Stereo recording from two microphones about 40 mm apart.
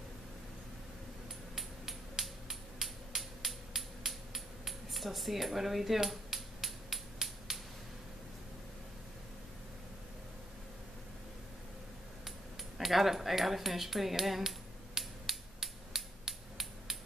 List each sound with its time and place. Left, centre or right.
1.5 s finger snapping: centre
12.3 s speech: centre
15.0 s finger snapping: centre